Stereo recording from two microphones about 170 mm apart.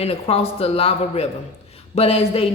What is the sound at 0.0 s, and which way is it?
A woman's voice, 35° left (ahead or behind).